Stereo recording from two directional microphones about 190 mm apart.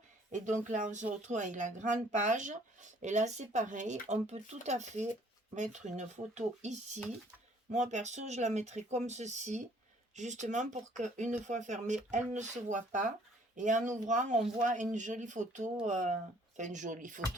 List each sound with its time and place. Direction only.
0.3 s speech: 40° right (ahead or behind)